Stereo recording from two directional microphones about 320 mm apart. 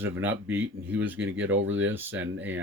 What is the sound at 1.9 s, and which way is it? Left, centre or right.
Speech, centre.